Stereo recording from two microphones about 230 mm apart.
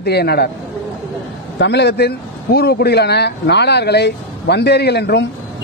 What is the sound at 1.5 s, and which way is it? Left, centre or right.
A man's voice, left.